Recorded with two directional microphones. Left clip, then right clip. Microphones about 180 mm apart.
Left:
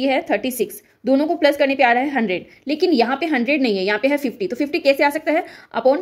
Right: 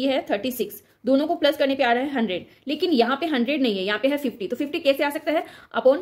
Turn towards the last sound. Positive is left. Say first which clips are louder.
# left 2 dB
turn(degrees=20)  # may be behind; listen again after turning